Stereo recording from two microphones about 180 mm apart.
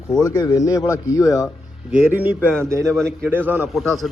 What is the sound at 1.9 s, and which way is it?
A man's voice, 10° right (ahead or behind).